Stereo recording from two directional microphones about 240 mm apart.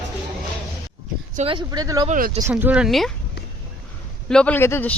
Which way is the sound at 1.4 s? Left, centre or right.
Right.